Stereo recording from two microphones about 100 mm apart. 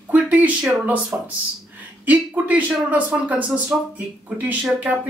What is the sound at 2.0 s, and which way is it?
Speech, 15° right (ahead or behind).